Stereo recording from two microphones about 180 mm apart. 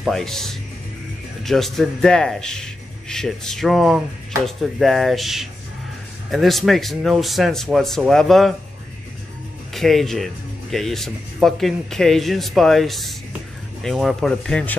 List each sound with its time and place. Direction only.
0.0 s speech: centre (ahead or behind)
9.8 s speech: centre (ahead or behind)